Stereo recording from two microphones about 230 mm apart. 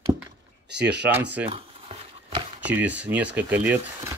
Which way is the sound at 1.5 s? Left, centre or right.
Right.